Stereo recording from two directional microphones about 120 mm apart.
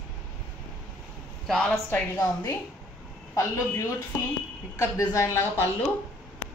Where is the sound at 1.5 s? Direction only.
5° left (ahead or behind).